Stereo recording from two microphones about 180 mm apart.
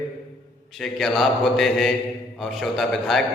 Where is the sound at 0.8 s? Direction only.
Centre (ahead or behind).